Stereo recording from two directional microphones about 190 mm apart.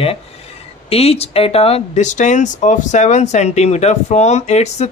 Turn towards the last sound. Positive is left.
turn(degrees=35)  # may be behind; listen again after turning